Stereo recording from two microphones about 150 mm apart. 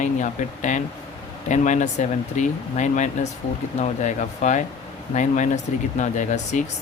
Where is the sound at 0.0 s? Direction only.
55° left (ahead or behind).